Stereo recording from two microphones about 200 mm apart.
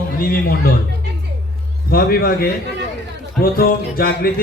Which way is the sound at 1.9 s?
50° left (ahead or behind).